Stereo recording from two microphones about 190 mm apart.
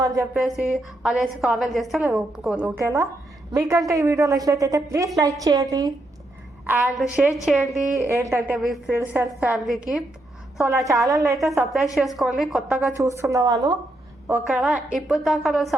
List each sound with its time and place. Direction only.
0.0 s a woman's voice: 20° right (ahead or behind)
0.3 s a woman's voice: centre (ahead or behind); by 5.6 s 20° right (ahead or behind)
6.7 s a woman's voice: 10° right (ahead or behind)
7.9 s a woman's voice: 15° right (ahead or behind)
10.7 s a woman's voice: 15° right (ahead or behind)
11.3 s a woman's voice: centre (ahead or behind)
13.0 s a woman's voice: 15° right (ahead or behind)
14.3 s a woman's voice: 10° right (ahead or behind)